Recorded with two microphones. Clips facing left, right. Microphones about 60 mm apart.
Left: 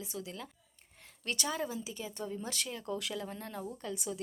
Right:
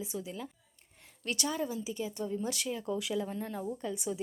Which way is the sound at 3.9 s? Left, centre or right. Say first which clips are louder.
Right 3 dB; centre.